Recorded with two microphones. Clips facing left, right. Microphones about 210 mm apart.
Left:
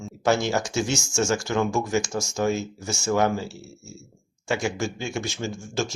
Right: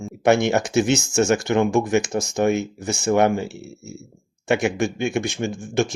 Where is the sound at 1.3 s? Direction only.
60° right (ahead or behind).